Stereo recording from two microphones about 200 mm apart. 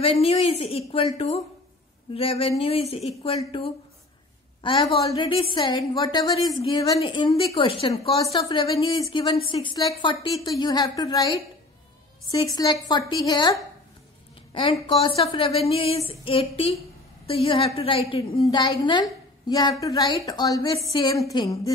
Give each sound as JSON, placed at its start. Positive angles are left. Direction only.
{"t": 0.0, "sound": "a woman's voice", "side_deg": 30}